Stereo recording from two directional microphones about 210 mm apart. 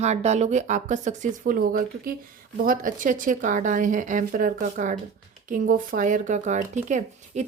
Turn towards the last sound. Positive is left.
turn(degrees=-35)  # may be behind; listen again after turning